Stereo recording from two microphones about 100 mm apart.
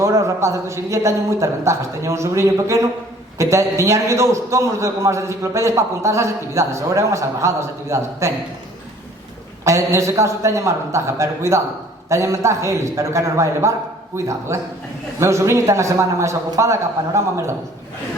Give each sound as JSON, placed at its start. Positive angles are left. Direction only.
{"t": 0.0, "sound": "a man's voice", "side_deg": -30}
{"t": 9.6, "sound": "a man's voice", "side_deg": -30}